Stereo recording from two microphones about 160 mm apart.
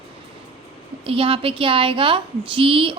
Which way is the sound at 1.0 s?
35° right (ahead or behind).